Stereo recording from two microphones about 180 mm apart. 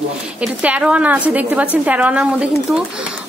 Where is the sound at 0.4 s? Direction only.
5° right (ahead or behind).